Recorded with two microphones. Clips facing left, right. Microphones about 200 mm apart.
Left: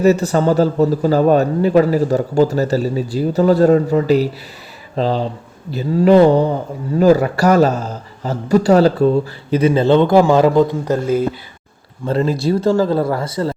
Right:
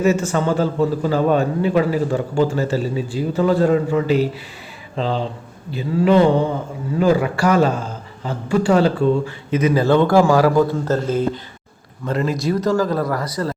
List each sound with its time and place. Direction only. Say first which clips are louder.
0.0 s a man's voice: left 4 dB; 35° left (ahead or behind); by 11.3 s 10° left (ahead or behind)
12.0 s speech: left 4 dB; 30° left (ahead or behind)